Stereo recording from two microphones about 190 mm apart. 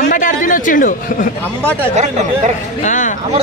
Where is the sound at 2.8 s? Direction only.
40° left (ahead or behind).